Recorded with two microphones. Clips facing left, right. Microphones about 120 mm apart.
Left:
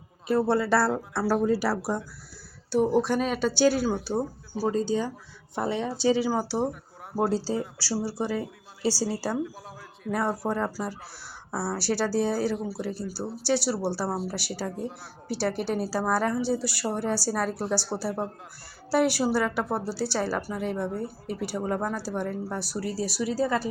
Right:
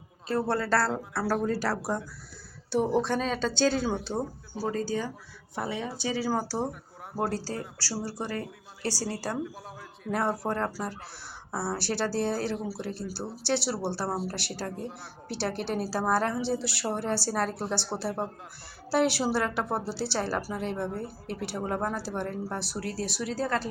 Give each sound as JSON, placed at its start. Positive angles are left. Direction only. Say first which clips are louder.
{"t": 0.4, "sound": "speech", "louder": "left 2 dB", "side_deg": 10}
{"t": 4.7, "sound": "speech", "louder": "left 4 dB", "side_deg": 20}
{"t": 5.6, "sound": "speech", "louder": "left 5 dB", "side_deg": -5}
{"t": 6.0, "sound": "speech", "louder": "left 10 dB", "side_deg": 30}
{"t": 6.2, "sound": "speech", "louder": "left 3 dB", "side_deg": 15}
{"t": 6.7, "sound": "a sound", "louder": "left 3 dB", "side_deg": 0}
{"t": 7.3, "sound": "a woman's voice", "louder": "left 6 dB", "side_deg": 15}